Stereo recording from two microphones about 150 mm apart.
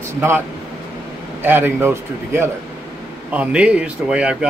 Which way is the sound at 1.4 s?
15° right (ahead or behind).